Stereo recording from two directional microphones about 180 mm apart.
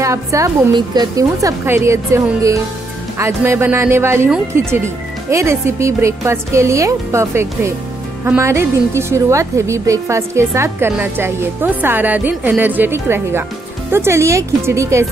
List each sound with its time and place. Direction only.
0.0 s a woman's voice: 15° right (ahead or behind)